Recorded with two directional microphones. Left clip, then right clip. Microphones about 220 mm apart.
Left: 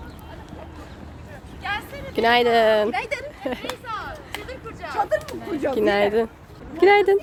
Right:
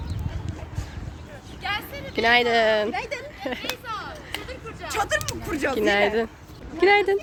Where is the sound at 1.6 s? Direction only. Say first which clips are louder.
Even; 30° right (ahead or behind).